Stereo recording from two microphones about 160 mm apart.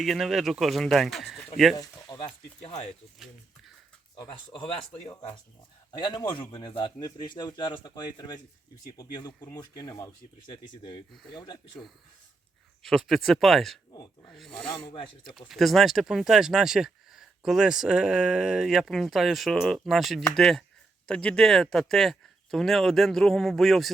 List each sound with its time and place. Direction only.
0.0 s speech: centre (ahead or behind)
1.7 s speech: 25° left (ahead or behind)
4.1 s speech: 30° left (ahead or behind)
12.8 s speech: centre (ahead or behind)
13.9 s speech: 25° left (ahead or behind)
14.3 s speech: centre (ahead or behind)